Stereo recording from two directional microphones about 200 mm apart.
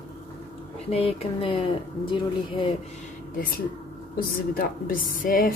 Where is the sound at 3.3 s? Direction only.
45° left (ahead or behind).